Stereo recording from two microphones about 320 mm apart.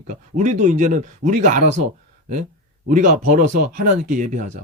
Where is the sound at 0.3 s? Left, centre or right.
Right.